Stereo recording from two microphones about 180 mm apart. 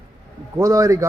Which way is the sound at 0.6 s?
20° right (ahead or behind).